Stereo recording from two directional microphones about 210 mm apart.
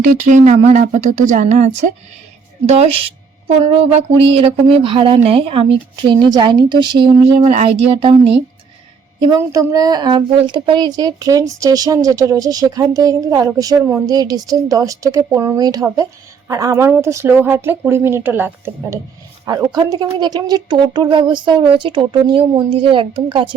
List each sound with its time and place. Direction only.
0.0 s speech: 40° right (ahead or behind)
2.6 s speech: 30° right (ahead or behind)
9.2 s speech: 15° right (ahead or behind)